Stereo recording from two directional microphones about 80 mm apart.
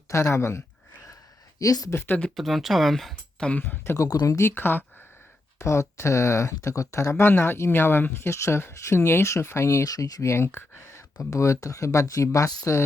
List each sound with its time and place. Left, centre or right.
0.1 s speech: left
1.5 s speech: left
1.9 s speech: left
2.3 s speech: centre
3.6 s speech: left
3.9 s speech: left
4.3 s speech: left
5.5 s speech: left
11.2 s speech: left